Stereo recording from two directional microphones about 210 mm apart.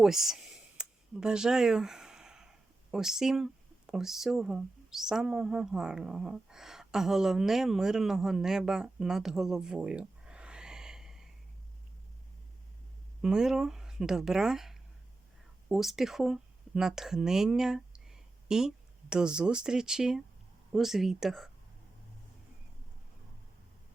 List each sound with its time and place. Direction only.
0.0 s speech: centre (ahead or behind)
13.2 s speech: 5° right (ahead or behind)